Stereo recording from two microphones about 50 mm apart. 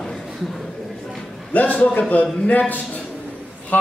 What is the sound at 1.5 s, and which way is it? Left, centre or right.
A man's voice, left.